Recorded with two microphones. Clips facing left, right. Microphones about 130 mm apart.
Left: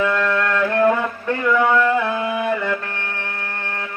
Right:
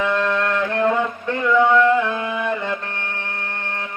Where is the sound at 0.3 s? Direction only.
20° right (ahead or behind).